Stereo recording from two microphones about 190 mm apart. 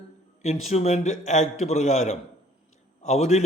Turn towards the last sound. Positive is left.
turn(degrees=35)  # may be behind; listen again after turning